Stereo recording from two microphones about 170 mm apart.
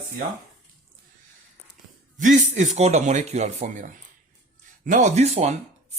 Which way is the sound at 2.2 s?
50° right (ahead or behind).